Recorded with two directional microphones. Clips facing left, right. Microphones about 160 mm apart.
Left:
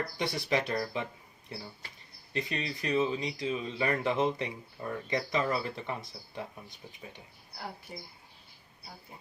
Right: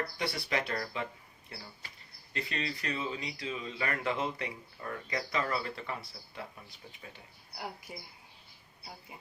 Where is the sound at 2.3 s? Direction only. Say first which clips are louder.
Left 2 dB; 20° left (ahead or behind).